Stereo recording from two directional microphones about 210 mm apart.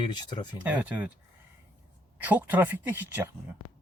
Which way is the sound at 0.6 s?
10° right (ahead or behind).